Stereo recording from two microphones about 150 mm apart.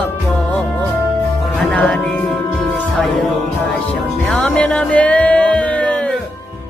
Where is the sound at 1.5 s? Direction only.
5° left (ahead or behind).